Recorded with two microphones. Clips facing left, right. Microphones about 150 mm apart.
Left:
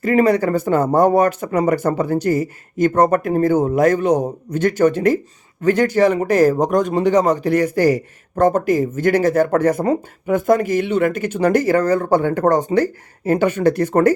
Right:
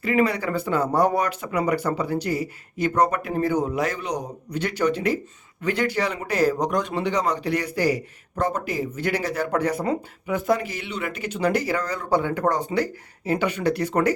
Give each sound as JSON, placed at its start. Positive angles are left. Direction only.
{"t": 0.0, "sound": "a man's voice", "side_deg": 45}